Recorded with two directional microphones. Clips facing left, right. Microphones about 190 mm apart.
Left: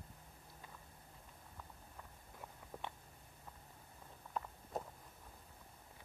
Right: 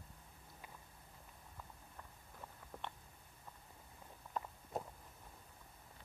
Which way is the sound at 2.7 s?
10° left (ahead or behind).